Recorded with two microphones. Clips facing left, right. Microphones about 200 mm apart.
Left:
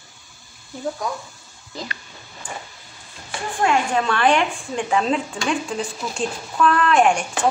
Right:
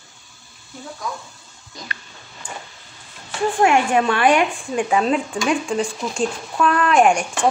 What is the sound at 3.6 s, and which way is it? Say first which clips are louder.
A woman's voice: right 3 dB; 15° right (ahead or behind).